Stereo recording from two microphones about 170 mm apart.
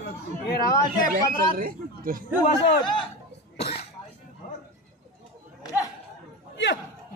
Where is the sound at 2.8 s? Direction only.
30° left (ahead or behind).